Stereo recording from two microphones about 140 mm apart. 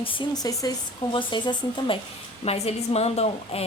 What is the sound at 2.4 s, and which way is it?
Speech, 45° left (ahead or behind).